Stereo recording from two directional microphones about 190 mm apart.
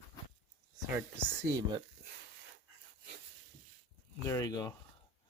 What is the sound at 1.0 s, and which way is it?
Speech, 15° right (ahead or behind).